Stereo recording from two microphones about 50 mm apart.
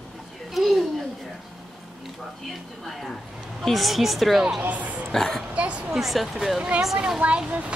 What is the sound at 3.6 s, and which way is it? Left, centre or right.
Child singing, centre.